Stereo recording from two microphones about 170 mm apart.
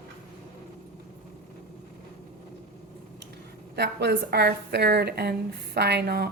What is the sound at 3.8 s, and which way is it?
A woman's voice, 75° right (ahead or behind).